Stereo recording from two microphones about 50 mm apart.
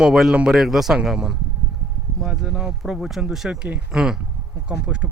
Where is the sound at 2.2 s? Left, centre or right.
Centre.